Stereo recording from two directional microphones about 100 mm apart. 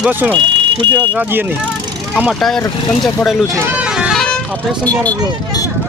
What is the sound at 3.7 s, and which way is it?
Vehicle, 10° right (ahead or behind).